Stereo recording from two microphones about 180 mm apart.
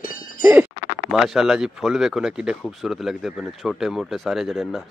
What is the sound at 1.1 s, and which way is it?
Speech, centre (ahead or behind).